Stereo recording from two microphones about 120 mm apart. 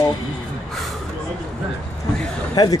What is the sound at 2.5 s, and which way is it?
Speech, 35° left (ahead or behind).